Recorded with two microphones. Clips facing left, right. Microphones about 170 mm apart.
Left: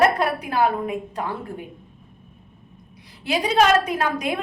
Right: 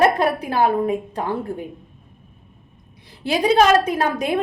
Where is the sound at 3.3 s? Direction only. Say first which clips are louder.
Right 3 dB; 35° right (ahead or behind).